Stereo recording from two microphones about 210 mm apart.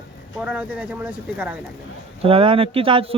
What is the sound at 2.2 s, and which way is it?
Speech, 25° right (ahead or behind).